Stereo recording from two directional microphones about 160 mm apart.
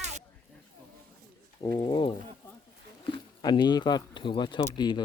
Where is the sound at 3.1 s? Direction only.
25° left (ahead or behind).